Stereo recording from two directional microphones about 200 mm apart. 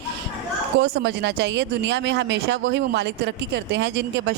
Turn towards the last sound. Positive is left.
turn(degrees=-60)  # may be behind; listen again after turning